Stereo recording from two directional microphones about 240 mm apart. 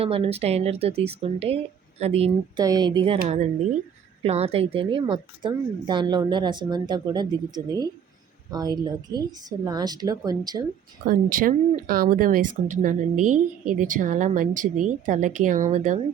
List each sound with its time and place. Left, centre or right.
0.0 s a woman's voice: right
4.2 s a woman's voice: right
11.0 s speech: right